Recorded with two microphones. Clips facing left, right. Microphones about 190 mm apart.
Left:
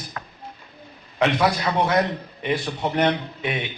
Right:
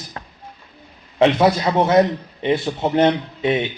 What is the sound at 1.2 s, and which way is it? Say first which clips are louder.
A man's voice: right 6 dB; 25° right (ahead or behind).